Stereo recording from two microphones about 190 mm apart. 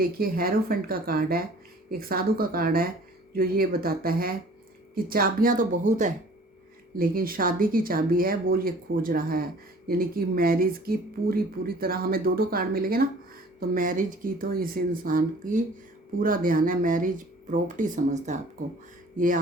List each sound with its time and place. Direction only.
0.0 s speech: 50° right (ahead or behind)
6.9 s speech: 50° right (ahead or behind)